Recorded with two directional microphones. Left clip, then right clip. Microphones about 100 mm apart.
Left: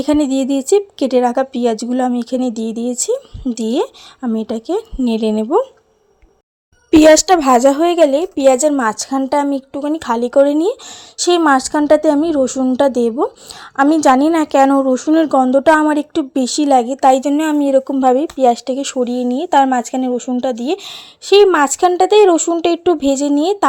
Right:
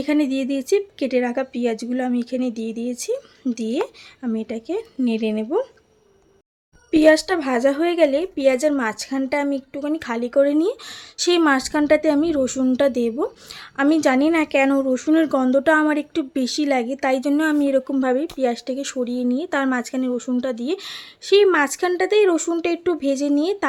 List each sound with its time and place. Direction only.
0.0 s speech: 45° left (ahead or behind)
7.4 s a woman's voice: 85° left
7.8 s a woman's voice: 50° left (ahead or behind); by 18.1 s 20° left (ahead or behind)
18.1 s speech: 35° left (ahead or behind)